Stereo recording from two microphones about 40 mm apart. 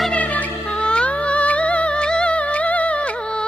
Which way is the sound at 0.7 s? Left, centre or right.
Left.